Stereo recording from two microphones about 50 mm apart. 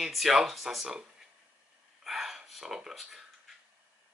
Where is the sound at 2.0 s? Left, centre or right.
Centre.